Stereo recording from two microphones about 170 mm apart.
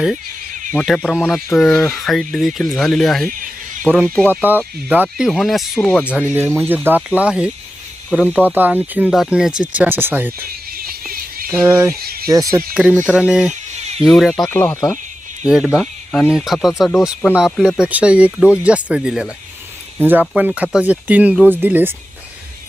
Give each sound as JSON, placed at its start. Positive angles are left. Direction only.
{"t": 0.7, "sound": "speech", "side_deg": 5}
{"t": 6.8, "sound": "speech", "side_deg": -10}
{"t": 8.5, "sound": "speech", "side_deg": -10}
{"t": 11.4, "sound": "speech", "side_deg": -10}
{"t": 12.7, "sound": "speech", "side_deg": -5}
{"t": 13.5, "sound": "a sound", "side_deg": -40}
{"t": 14.0, "sound": "speech", "side_deg": 0}
{"t": 14.5, "sound": "speech", "side_deg": 15}
{"t": 15.4, "sound": "speech", "side_deg": 0}